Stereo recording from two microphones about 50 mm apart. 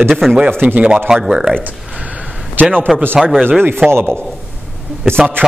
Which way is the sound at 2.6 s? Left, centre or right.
Right.